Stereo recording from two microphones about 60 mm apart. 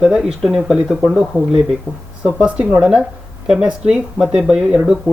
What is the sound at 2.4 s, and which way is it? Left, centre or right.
Speech, right.